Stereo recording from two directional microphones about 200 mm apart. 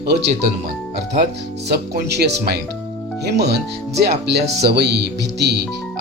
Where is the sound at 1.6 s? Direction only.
55° right (ahead or behind).